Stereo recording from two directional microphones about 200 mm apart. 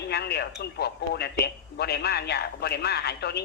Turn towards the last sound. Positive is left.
turn(degrees=55)  # may be behind; listen again after turning